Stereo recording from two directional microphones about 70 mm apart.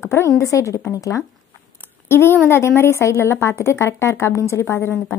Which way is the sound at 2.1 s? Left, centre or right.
Left.